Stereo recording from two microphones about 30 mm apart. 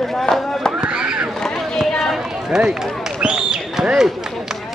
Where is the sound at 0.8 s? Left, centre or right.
Right.